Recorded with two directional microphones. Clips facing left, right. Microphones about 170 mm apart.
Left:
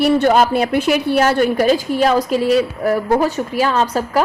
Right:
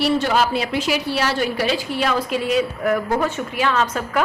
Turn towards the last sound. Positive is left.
turn(degrees=35)  # may be behind; listen again after turning